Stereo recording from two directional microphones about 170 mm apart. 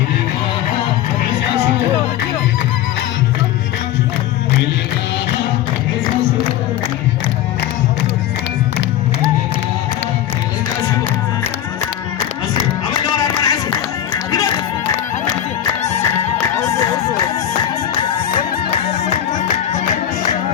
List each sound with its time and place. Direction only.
12.9 s a sound: 20° left (ahead or behind)
16.6 s music: 15° left (ahead or behind)
18.7 s music: 40° left (ahead or behind)